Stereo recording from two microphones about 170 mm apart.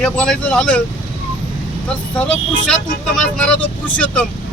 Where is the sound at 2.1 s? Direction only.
5° left (ahead or behind).